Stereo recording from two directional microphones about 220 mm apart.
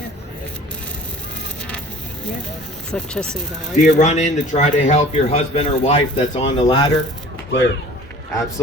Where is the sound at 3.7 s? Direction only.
35° left (ahead or behind); by 6.9 s 20° left (ahead or behind).